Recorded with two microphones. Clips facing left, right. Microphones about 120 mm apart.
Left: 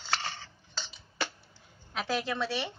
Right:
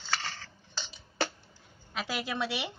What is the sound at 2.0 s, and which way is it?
Speech, 10° right (ahead or behind).